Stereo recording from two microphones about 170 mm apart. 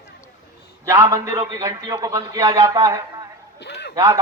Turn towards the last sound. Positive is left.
turn(degrees=-20)  # may be behind; listen again after turning